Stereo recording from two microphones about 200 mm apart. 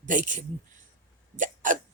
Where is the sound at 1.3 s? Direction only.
40° right (ahead or behind).